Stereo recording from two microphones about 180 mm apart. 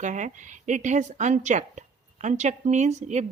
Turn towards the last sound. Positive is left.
turn(degrees=-40)  # may be behind; listen again after turning